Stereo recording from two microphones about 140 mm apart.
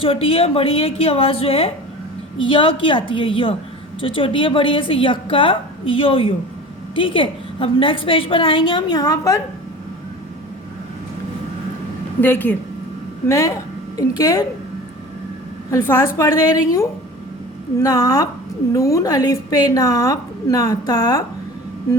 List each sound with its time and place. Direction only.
0.0 s a woman's voice: 40° left (ahead or behind); by 9.4 s 25° left (ahead or behind)
12.2 s a woman's voice: 15° left (ahead or behind)
15.7 s a woman's voice: 20° left (ahead or behind)